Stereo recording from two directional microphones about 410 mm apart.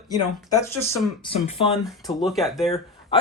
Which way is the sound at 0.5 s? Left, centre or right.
Centre.